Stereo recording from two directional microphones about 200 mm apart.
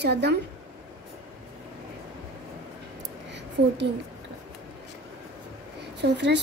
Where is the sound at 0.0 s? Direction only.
55° right (ahead or behind).